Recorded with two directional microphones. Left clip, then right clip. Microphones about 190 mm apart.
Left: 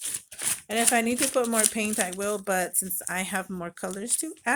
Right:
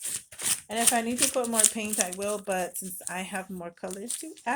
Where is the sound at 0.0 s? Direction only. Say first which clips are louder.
Left 1 dB; 25° left (ahead or behind).